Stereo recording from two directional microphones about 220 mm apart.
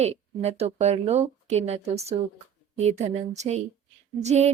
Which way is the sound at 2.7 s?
30° right (ahead or behind).